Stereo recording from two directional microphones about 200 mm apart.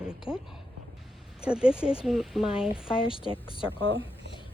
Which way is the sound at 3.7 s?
25° left (ahead or behind).